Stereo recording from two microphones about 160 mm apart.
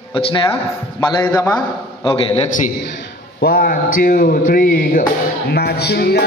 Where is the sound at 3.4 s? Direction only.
70° left (ahead or behind).